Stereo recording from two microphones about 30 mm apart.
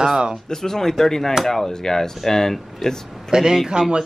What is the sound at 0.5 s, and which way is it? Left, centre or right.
Speech, centre.